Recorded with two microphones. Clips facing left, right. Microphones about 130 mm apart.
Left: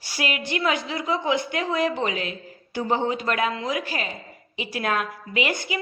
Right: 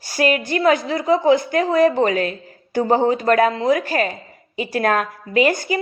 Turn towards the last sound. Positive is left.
turn(degrees=-40)  # may be behind; listen again after turning